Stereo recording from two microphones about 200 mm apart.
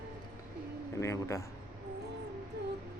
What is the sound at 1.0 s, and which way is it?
Speech, 15° left (ahead or behind).